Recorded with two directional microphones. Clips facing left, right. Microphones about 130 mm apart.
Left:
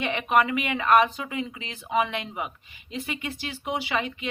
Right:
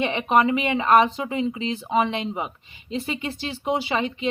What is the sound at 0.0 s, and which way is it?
Speech, 25° right (ahead or behind).